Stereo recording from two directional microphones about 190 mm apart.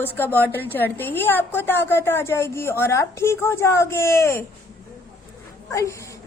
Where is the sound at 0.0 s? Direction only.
10° left (ahead or behind).